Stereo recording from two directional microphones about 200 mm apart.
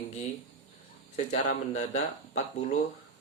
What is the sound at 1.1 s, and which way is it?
Speech, 35° left (ahead or behind).